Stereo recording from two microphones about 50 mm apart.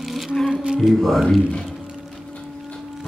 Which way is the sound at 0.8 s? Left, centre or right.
Centre.